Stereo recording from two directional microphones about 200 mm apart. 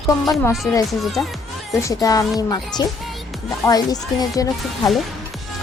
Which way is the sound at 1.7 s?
15° left (ahead or behind).